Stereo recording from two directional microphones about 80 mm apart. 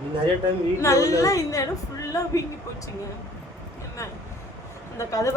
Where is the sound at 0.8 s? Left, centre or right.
Left.